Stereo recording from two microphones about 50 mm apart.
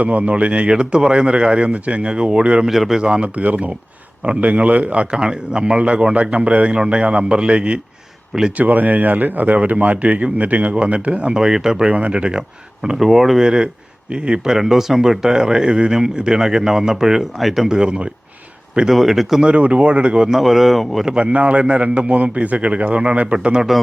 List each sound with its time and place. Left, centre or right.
0.0 s speech: right
2.6 s speech: centre
3.0 s speech: right
5.1 s speech: centre
8.3 s speech: centre
8.5 s speech: right
11.3 s speech: centre
17.7 s speech: centre
18.9 s speech: centre
19.4 s speech: right
20.4 s speech: centre
21.2 s speech: right